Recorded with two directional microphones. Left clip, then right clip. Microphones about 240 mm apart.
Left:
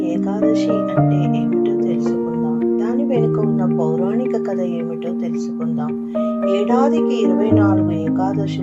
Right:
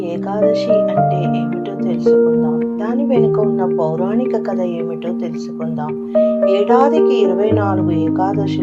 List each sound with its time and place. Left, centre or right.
3.1 s music: right
6.4 s speech: right